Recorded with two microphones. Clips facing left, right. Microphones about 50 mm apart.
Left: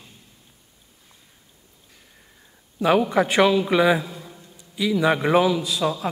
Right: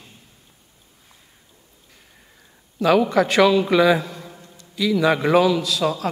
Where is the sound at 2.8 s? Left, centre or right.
Centre.